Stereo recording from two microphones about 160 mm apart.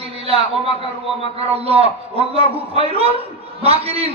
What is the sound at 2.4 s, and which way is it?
A man's voice, 40° right (ahead or behind).